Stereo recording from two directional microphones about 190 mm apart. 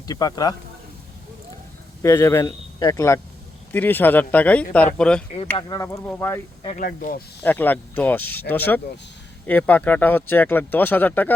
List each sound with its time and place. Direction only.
0.1 s speech: 20° left (ahead or behind)
2.0 s speech: 15° left (ahead or behind)
5.5 s speech: 20° left (ahead or behind)
6.7 s speech: 45° left (ahead or behind)
7.4 s speech: 10° left (ahead or behind)